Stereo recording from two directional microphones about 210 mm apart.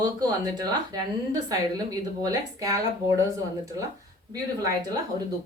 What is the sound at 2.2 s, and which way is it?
Speech, 15° right (ahead or behind).